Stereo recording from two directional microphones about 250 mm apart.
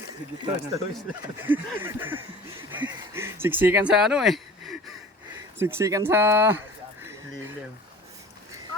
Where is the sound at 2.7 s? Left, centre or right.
Centre.